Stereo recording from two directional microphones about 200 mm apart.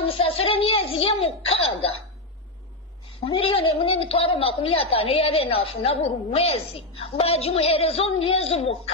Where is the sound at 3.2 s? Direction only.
25° left (ahead or behind).